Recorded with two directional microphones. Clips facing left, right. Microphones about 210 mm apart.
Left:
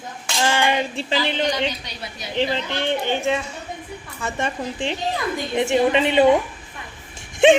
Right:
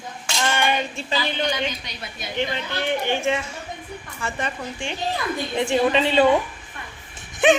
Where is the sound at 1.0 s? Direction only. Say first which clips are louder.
Left 3 dB; 30° left (ahead or behind).